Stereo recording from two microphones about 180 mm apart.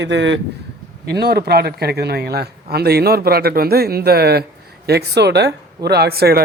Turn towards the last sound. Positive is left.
turn(degrees=-60)  # may be behind; listen again after turning